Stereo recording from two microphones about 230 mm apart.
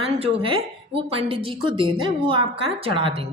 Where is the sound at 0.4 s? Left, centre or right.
Right.